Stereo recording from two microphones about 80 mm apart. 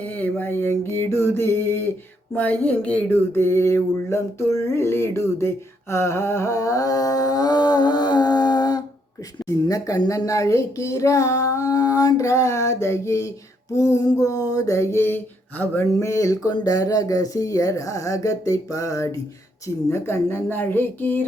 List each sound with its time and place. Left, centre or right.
0.0 s music: centre
2.3 s a sound: centre
5.9 s speech: left
9.4 s speech: left
10.1 s a sound: left
16.0 s speech: left
19.6 s music: left